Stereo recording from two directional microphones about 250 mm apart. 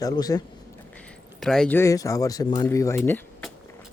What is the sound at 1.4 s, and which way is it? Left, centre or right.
Speech, centre.